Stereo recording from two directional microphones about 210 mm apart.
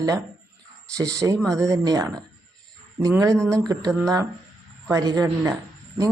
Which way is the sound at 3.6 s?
15° right (ahead or behind).